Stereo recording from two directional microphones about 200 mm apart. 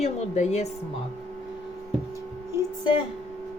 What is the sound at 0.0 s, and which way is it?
Speech, 35° left (ahead or behind).